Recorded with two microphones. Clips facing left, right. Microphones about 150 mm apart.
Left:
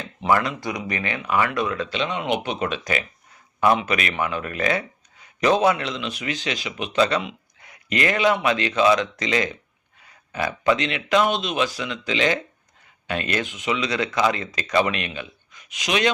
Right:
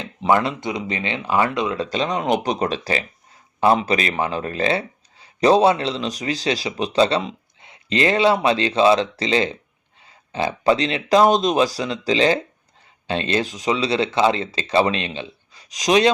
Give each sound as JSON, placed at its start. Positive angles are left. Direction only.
{"t": 0.3, "sound": "speech", "side_deg": -20}
{"t": 1.8, "sound": "speech", "side_deg": -40}